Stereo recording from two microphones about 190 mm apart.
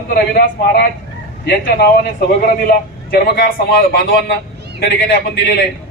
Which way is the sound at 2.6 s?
50° left (ahead or behind).